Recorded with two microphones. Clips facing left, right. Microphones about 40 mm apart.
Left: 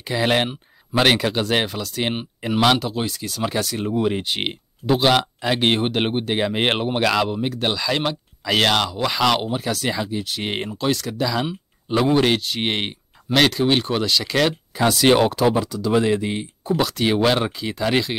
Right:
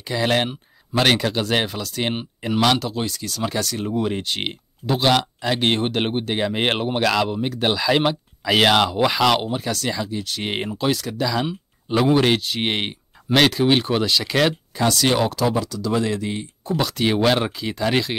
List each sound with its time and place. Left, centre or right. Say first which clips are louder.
0.0 s speech: left 1 dB; centre
10.5 s speech: right 1 dB; centre
14.8 s speech: left 1 dB; centre
15.0 s speech: left 7 dB; left
16.7 s speech: left 1 dB; centre